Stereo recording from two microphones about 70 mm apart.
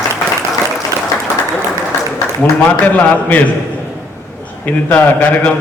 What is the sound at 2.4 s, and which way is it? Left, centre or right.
A man's voice, left.